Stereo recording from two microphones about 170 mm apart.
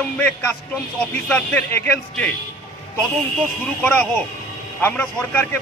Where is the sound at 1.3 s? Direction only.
10° left (ahead or behind).